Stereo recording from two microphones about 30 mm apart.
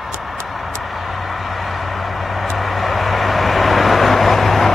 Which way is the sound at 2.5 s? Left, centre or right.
Centre.